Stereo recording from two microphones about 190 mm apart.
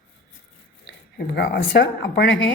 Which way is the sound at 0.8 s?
60° left (ahead or behind).